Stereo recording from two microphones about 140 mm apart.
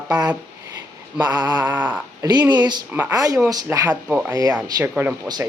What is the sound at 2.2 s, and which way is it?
Speech, 30° right (ahead or behind).